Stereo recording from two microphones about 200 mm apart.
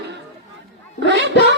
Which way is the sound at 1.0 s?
60° right (ahead or behind).